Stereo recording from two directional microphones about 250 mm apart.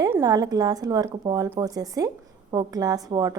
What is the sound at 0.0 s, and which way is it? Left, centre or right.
A woman's voice, centre.